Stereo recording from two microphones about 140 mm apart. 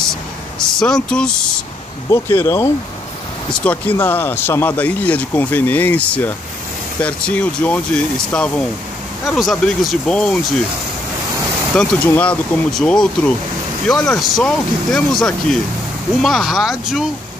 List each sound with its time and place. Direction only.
0.7 s speech: 5° left (ahead or behind)
2.0 s speech: 20° left (ahead or behind)
3.6 s speech: 10° left (ahead or behind)
11.7 s speech: 5° left (ahead or behind)